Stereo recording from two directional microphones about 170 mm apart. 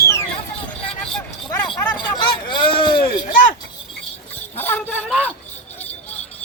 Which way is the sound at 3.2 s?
50° left (ahead or behind).